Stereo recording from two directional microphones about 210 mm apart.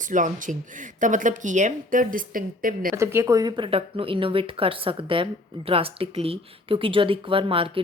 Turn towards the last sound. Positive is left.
turn(degrees=-25)  # may be behind; listen again after turning